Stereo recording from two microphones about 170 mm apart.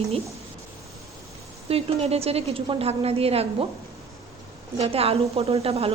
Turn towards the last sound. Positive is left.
turn(degrees=-35)  # may be behind; listen again after turning